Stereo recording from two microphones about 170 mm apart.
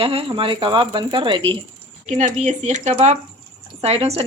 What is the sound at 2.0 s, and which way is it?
Speech, 45° right (ahead or behind).